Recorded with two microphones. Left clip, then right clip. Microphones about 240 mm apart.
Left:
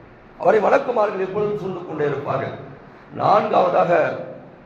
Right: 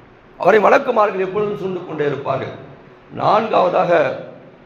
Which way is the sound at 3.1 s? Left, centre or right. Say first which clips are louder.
Right 1 dB; right.